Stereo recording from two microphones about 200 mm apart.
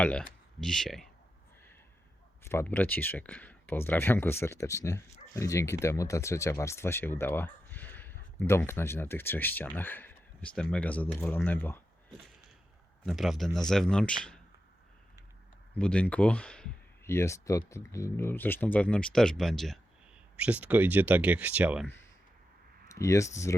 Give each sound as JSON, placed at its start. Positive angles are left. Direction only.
{"t": 0.0, "sound": "speech", "side_deg": 5}
{"t": 2.4, "sound": "speech", "side_deg": 10}
{"t": 13.1, "sound": "speech", "side_deg": 0}
{"t": 15.8, "sound": "speech", "side_deg": 5}
{"t": 22.9, "sound": "speech", "side_deg": 15}